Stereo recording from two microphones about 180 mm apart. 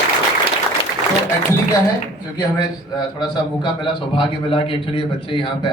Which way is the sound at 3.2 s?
25° left (ahead or behind).